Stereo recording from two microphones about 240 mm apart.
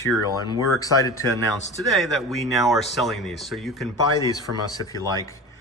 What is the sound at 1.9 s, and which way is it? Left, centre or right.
Speech, centre.